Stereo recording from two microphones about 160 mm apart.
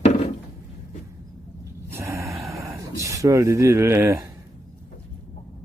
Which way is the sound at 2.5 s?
20° right (ahead or behind).